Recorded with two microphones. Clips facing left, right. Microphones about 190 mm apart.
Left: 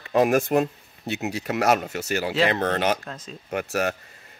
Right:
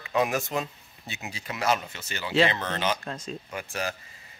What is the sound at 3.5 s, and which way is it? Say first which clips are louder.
Speech: left 9 dB; 70° left (ahead or behind).